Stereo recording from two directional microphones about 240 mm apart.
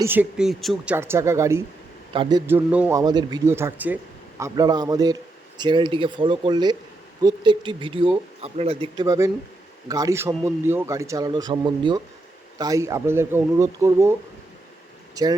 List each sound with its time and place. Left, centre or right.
0.0 s a man's voice: centre
2.5 s a man's voice: centre